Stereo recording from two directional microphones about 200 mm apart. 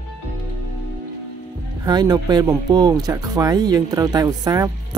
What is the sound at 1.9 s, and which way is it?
Speech, 20° right (ahead or behind).